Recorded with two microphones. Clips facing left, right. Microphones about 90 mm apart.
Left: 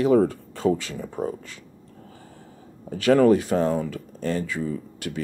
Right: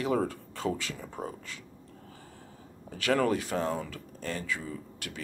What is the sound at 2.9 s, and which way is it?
Speech, 30° left (ahead or behind).